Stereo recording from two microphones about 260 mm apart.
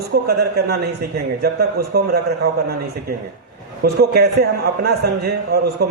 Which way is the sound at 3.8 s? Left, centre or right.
Right.